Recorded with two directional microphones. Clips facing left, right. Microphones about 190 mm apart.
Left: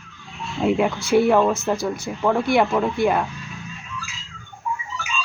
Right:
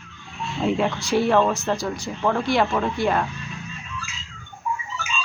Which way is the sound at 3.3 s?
Centre (ahead or behind).